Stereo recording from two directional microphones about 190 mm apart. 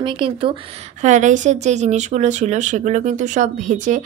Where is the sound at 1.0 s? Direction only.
40° right (ahead or behind).